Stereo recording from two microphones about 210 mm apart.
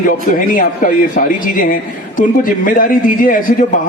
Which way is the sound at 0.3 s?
40° left (ahead or behind).